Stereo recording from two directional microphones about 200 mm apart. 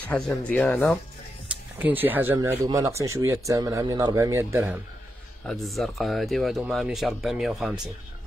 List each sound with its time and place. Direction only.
0.1 s speech: 5° left (ahead or behind)
1.8 s speech: 10° right (ahead or behind)
5.4 s speech: centre (ahead or behind)